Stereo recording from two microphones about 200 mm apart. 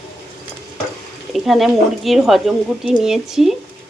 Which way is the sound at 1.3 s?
Centre (ahead or behind).